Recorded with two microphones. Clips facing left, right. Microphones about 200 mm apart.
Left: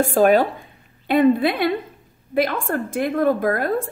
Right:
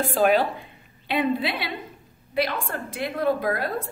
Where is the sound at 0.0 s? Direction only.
45° left (ahead or behind).